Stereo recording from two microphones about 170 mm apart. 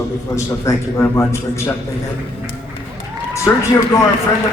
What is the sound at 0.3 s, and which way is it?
A man's voice, 15° left (ahead or behind).